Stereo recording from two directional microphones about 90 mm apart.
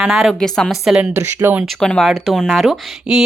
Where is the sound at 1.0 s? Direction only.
25° right (ahead or behind).